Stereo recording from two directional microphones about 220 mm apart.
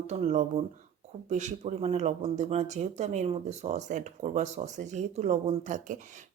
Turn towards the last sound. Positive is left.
turn(degrees=-35)  # may be behind; listen again after turning